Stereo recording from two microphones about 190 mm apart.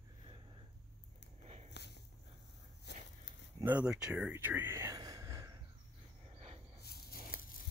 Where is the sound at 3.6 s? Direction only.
5° right (ahead or behind).